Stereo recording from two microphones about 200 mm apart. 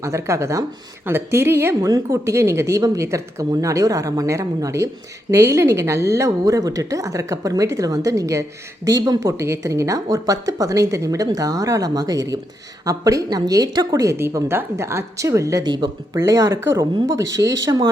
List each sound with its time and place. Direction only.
0.0 s speech: 15° right (ahead or behind)